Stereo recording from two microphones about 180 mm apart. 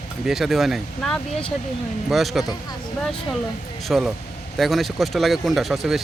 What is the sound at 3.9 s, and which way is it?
Speech, centre (ahead or behind).